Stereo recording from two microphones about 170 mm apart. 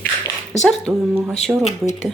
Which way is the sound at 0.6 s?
5° right (ahead or behind).